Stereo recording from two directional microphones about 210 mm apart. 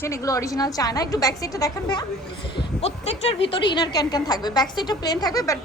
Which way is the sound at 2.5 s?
30° left (ahead or behind).